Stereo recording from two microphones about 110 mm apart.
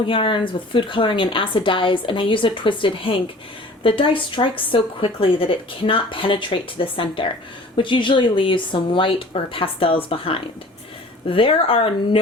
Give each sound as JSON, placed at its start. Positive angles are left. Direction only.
{"t": 0.0, "sound": "speech", "side_deg": 50}